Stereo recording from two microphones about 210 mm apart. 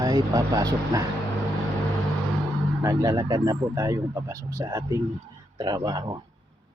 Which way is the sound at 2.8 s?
15° right (ahead or behind).